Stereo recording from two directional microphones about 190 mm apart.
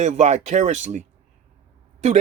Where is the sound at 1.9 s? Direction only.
35° right (ahead or behind).